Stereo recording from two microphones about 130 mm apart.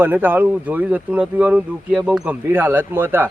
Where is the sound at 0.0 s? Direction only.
15° right (ahead or behind).